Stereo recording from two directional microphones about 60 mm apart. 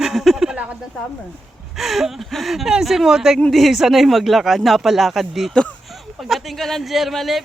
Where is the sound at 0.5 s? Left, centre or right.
Right.